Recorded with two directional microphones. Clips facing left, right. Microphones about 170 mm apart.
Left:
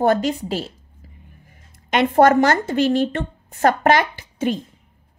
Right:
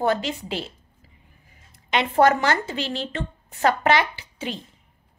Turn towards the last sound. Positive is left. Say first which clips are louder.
# left 9 dB
turn(degrees=50)  # may be behind; listen again after turning